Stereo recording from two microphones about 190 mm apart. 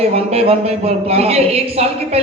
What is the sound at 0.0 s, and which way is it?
A man's voice, 30° right (ahead or behind).